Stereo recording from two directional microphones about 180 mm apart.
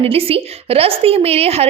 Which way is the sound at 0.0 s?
30° right (ahead or behind).